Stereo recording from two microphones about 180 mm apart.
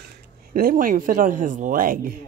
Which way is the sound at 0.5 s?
50° right (ahead or behind).